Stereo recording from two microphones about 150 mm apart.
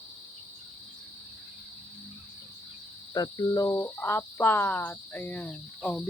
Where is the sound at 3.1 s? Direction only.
25° left (ahead or behind).